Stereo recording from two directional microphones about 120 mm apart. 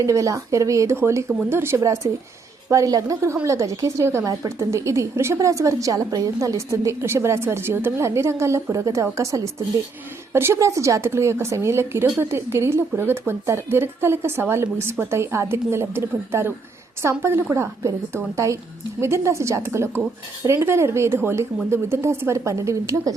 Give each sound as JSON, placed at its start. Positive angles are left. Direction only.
{"t": 0.0, "sound": "a woman's voice", "side_deg": -30}